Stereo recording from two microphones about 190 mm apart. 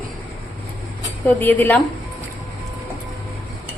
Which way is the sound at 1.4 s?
10° left (ahead or behind).